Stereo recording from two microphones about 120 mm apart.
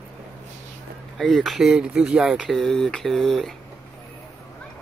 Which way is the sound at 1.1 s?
Centre (ahead or behind).